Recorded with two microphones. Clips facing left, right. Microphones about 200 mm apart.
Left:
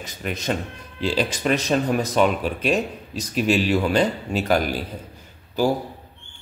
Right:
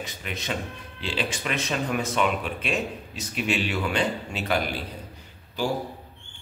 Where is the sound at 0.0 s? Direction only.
40° left (ahead or behind).